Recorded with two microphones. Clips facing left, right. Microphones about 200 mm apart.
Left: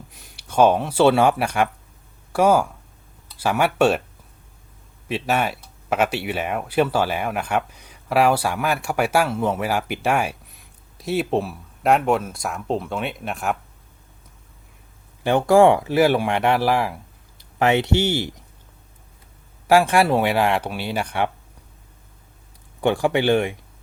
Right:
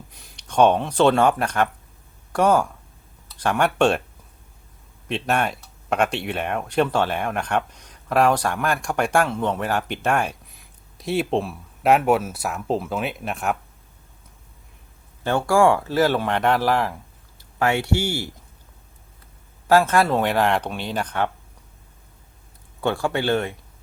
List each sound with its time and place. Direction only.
0.1 s speech: 5° left (ahead or behind)
5.0 s speech: 5° left (ahead or behind)
15.2 s speech: 15° left (ahead or behind)
17.6 s speech: 20° left (ahead or behind)
19.6 s speech: 10° left (ahead or behind)
22.8 s speech: 15° left (ahead or behind)